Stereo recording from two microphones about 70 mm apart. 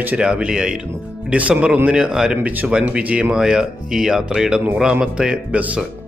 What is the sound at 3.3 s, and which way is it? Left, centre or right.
Speech, centre.